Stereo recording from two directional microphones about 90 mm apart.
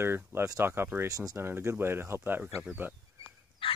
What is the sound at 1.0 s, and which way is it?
Speech, 40° right (ahead or behind).